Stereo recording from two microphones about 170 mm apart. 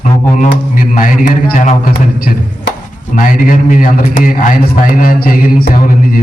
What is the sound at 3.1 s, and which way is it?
A man's voice, 55° left (ahead or behind).